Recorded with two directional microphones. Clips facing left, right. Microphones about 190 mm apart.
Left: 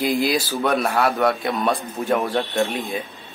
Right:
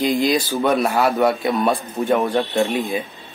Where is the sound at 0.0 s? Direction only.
Centre (ahead or behind).